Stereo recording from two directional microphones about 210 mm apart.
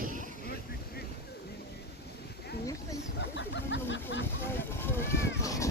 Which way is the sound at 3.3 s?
55° left (ahead or behind).